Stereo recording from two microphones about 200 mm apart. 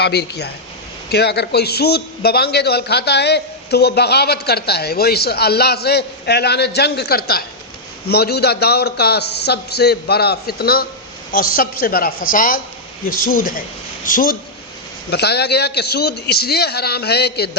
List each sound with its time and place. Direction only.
0.0 s a man's voice: 55° left (ahead or behind)
15.1 s a man's voice: 55° left (ahead or behind)